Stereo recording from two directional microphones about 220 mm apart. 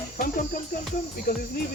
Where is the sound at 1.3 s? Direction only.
40° left (ahead or behind).